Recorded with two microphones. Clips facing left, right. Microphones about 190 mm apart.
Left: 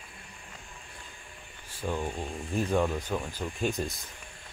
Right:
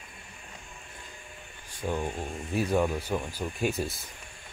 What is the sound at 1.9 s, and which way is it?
Speech, 15° right (ahead or behind).